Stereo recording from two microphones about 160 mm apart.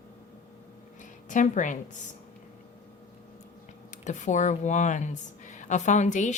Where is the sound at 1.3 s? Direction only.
50° left (ahead or behind).